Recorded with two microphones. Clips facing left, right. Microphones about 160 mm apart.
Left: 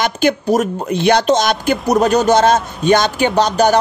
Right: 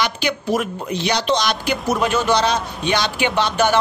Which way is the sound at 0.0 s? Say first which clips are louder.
Left 6 dB; 45° left (ahead or behind).